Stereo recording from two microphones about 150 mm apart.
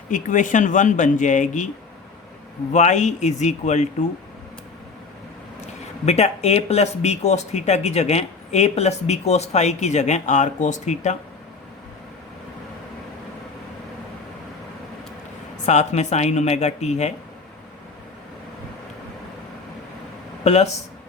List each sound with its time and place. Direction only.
0.1 s speech: 60° left (ahead or behind)
2.7 s speech: 50° left (ahead or behind)
6.1 s speech: 50° left (ahead or behind)
15.6 s speech: 50° left (ahead or behind)
20.4 s speech: 45° left (ahead or behind)